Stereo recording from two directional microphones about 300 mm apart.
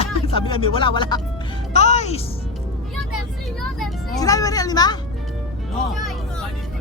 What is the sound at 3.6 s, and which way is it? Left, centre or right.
Vehicle, centre.